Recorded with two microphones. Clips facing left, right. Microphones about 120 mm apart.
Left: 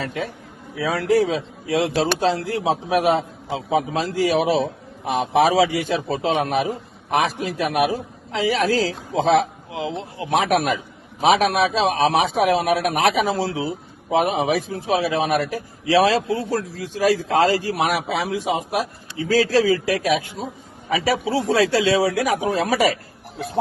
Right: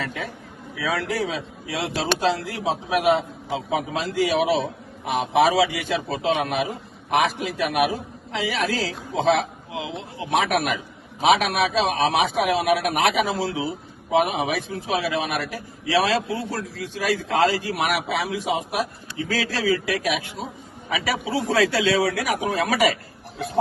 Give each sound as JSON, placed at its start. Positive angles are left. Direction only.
{"t": 0.0, "sound": "a man's voice", "side_deg": 30}